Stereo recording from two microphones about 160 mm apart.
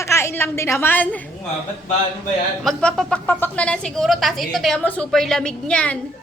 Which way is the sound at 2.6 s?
5° left (ahead or behind).